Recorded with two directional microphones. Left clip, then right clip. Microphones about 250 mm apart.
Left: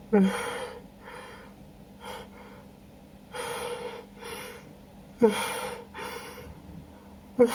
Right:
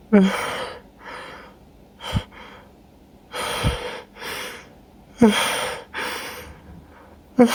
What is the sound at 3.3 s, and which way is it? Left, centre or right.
Gasp, right.